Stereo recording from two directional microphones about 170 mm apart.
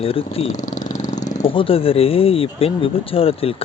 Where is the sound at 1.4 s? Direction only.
30° left (ahead or behind).